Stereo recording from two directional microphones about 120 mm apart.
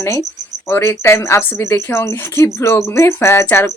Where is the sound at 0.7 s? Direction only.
20° left (ahead or behind).